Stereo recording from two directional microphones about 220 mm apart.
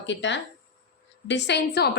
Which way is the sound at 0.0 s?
55° left (ahead or behind).